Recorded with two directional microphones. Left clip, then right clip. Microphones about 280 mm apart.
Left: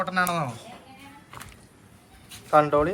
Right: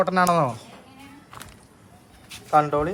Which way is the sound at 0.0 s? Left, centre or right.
Right.